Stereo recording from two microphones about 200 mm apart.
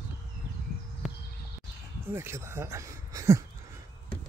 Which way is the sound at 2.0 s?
10° right (ahead or behind).